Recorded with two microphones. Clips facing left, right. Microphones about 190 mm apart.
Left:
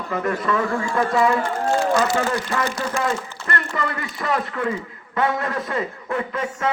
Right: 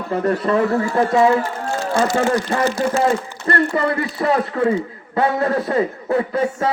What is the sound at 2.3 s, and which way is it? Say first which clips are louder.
Speech: right 5 dB; 35° right (ahead or behind).